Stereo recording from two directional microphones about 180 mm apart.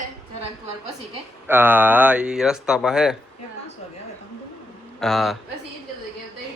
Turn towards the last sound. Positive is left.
turn(degrees=0)  # may be behind; listen again after turning